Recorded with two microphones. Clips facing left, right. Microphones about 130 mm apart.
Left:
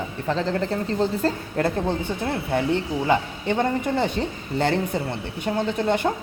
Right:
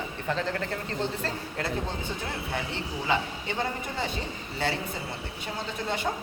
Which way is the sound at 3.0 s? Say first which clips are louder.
Left 4 dB; 50° left (ahead or behind).